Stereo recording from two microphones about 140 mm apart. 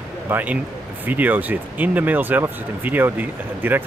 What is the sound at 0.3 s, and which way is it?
Speech, 15° right (ahead or behind).